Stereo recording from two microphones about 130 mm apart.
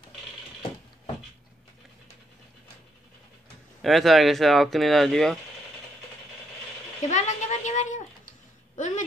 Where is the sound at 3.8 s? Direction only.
Centre (ahead or behind).